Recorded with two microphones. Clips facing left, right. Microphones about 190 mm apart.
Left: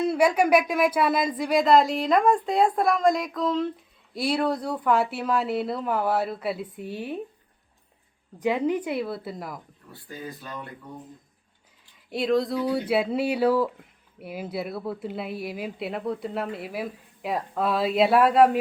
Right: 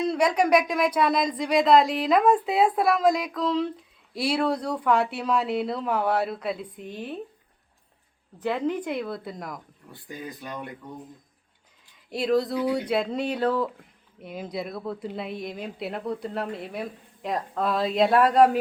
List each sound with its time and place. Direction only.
0.0 s a woman's voice: 5° left (ahead or behind)
8.4 s a woman's voice: 10° left (ahead or behind)
9.9 s speech: 15° right (ahead or behind)
12.1 s a woman's voice: centre (ahead or behind)